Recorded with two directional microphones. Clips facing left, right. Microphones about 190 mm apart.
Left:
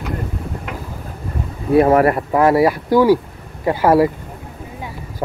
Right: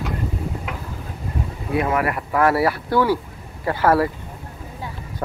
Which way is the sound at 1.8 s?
35° left (ahead or behind).